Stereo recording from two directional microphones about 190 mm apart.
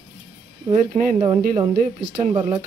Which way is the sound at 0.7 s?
35° right (ahead or behind).